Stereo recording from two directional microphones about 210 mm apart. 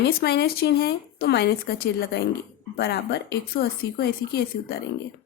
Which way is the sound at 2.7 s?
50° left (ahead or behind).